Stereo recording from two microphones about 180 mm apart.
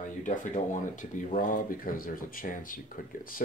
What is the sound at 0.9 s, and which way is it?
Speech, 45° left (ahead or behind).